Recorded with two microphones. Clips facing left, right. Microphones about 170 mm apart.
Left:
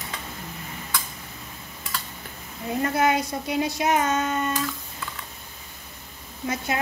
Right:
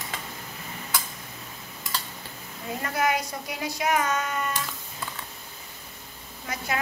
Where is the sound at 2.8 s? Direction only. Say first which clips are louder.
Left 4 dB; 25° left (ahead or behind).